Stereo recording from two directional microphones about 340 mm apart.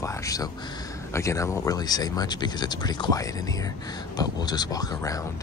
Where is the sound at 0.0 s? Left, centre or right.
Centre.